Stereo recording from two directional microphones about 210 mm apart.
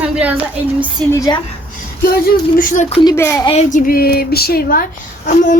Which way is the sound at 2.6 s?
40° left (ahead or behind).